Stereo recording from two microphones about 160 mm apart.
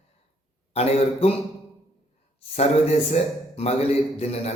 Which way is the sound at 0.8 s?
40° left (ahead or behind).